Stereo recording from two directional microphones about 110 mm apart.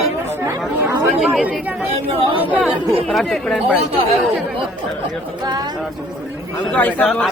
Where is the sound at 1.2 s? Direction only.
Centre (ahead or behind).